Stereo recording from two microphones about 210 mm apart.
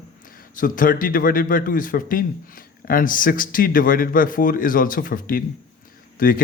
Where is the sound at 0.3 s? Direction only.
40° left (ahead or behind).